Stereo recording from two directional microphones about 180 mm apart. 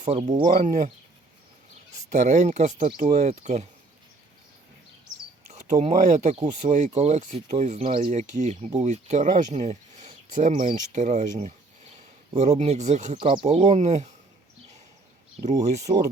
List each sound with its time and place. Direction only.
0.0 s speech: 30° right (ahead or behind)
0.4 s speech: 50° right (ahead or behind)
2.1 s speech: 45° right (ahead or behind)
5.5 s speech: 40° right (ahead or behind)
10.5 s speech: 30° right (ahead or behind)
10.8 s speech: 40° right (ahead or behind)
13.1 s speech: 30° right (ahead or behind)
15.7 s speech: 40° right (ahead or behind)